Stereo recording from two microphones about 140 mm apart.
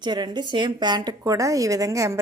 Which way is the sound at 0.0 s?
30° right (ahead or behind).